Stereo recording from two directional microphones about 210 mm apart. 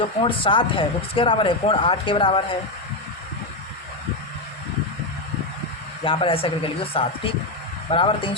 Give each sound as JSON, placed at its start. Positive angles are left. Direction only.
{"t": 0.3, "sound": "speech", "side_deg": 25}
{"t": 6.1, "sound": "speech", "side_deg": 25}